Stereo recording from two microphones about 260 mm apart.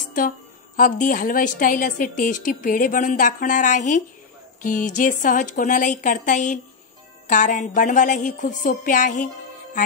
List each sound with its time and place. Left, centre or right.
0.7 s a woman's voice: left